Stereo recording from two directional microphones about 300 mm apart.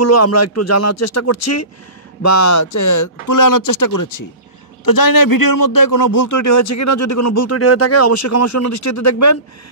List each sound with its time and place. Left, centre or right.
0.0 s a man's voice: left